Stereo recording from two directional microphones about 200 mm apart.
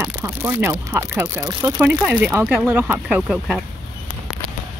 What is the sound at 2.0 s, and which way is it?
Speech, 10° right (ahead or behind).